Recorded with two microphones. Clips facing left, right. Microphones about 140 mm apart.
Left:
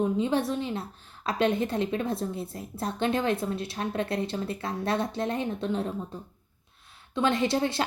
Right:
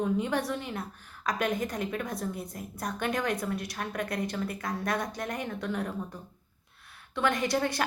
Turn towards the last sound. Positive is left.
turn(degrees=25)  # may be behind; listen again after turning